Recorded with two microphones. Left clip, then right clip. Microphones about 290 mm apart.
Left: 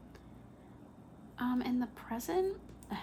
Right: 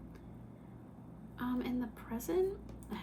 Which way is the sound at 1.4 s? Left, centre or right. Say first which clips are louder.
Left 3 dB; left.